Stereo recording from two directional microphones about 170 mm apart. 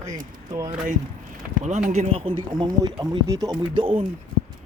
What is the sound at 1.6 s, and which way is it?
Speech, 45° right (ahead or behind).